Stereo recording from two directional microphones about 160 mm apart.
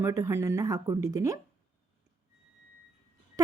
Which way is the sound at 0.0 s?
20° right (ahead or behind).